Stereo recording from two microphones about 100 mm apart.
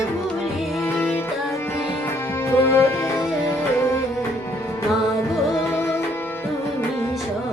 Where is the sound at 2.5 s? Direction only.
25° left (ahead or behind).